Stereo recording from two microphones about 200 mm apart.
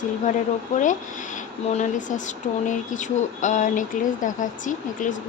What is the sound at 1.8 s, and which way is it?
Speech, 40° left (ahead or behind).